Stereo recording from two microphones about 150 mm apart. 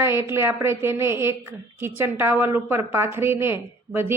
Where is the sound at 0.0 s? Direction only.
15° right (ahead or behind).